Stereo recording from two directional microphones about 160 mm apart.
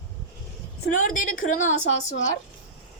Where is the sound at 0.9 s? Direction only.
55° left (ahead or behind).